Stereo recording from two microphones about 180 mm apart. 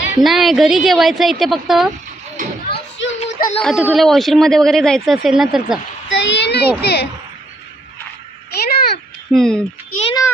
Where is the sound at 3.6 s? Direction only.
Centre (ahead or behind).